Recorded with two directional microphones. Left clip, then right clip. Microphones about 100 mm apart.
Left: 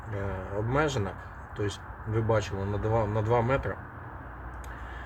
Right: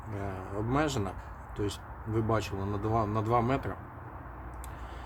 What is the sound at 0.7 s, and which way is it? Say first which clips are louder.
Speech: left 2 dB; 50° right (ahead or behind).